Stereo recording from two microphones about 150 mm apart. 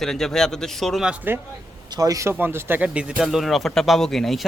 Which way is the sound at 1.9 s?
25° right (ahead or behind).